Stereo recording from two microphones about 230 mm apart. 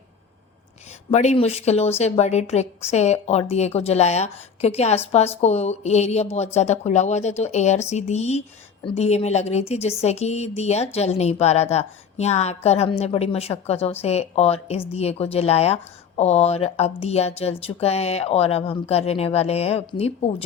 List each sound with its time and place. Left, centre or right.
1.1 s speech: left